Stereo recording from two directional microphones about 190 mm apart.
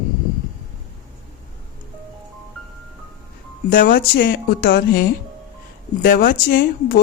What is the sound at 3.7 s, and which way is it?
Speech, 50° left (ahead or behind).